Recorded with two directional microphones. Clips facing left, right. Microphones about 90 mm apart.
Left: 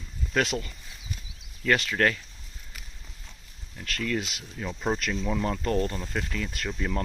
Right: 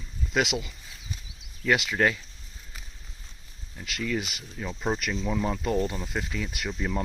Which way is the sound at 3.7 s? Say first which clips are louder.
Even; 10° right (ahead or behind).